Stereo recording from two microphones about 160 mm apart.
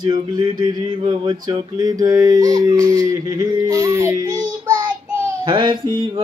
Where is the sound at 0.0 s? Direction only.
30° right (ahead or behind).